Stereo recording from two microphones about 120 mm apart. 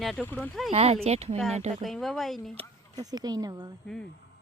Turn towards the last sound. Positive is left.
turn(degrees=-35)  # may be behind; listen again after turning